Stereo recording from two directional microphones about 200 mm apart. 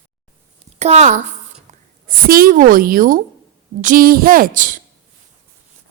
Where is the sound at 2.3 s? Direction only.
45° right (ahead or behind).